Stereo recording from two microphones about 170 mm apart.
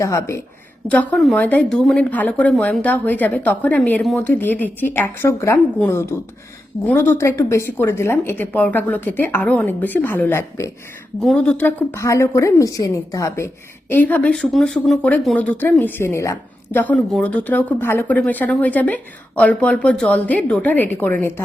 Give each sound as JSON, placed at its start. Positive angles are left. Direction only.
{"t": 0.0, "sound": "speech", "side_deg": 15}
{"t": 0.9, "sound": "speech", "side_deg": 5}